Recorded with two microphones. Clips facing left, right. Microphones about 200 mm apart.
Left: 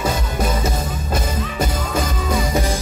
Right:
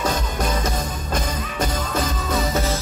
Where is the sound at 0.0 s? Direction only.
10° left (ahead or behind).